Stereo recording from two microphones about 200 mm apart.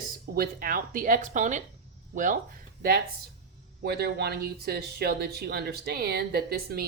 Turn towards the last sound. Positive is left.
turn(degrees=-50)  # may be behind; listen again after turning